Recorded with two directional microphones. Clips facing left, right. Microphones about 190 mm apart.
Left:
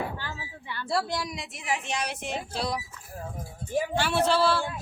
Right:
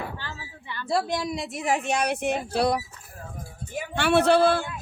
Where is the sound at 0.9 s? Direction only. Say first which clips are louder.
Right 4 dB; 20° right (ahead or behind).